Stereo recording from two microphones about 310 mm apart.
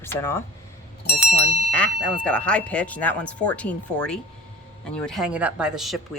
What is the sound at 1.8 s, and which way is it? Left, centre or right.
Speech, centre.